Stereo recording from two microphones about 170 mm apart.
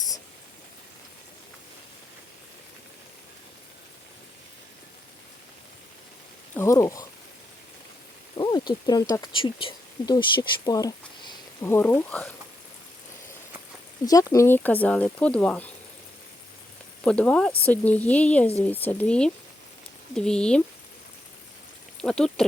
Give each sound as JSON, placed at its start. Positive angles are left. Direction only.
{"t": 6.6, "sound": "speech", "side_deg": 15}
{"t": 8.4, "sound": "speech", "side_deg": 25}
{"t": 14.0, "sound": "speech", "side_deg": 20}
{"t": 17.0, "sound": "speech", "side_deg": 5}
{"t": 22.0, "sound": "speech", "side_deg": 5}